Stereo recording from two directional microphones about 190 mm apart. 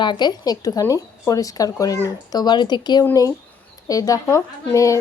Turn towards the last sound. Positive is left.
turn(degrees=15)  # may be behind; listen again after turning